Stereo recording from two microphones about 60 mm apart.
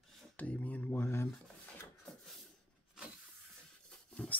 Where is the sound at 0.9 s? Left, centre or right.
Left.